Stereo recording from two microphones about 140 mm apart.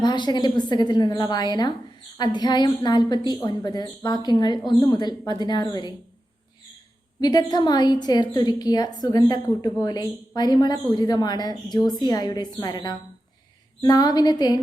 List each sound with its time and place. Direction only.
0.0 s a woman's voice: 30° left (ahead or behind)
7.2 s a woman's voice: 30° left (ahead or behind)